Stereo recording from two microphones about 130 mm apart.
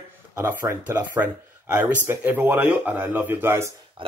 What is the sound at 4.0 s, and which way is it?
Speech, 40° right (ahead or behind).